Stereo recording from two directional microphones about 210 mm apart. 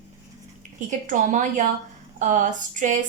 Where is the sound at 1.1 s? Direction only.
35° right (ahead or behind).